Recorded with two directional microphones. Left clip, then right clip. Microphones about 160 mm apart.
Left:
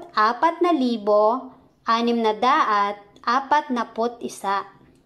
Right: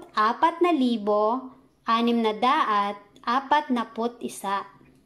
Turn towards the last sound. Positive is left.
turn(degrees=-15)  # may be behind; listen again after turning